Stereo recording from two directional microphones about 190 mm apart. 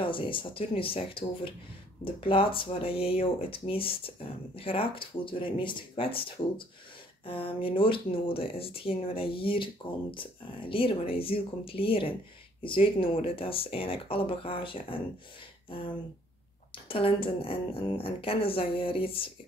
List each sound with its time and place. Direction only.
0.0 s speech: 25° left (ahead or behind)
16.7 s speech: 30° left (ahead or behind)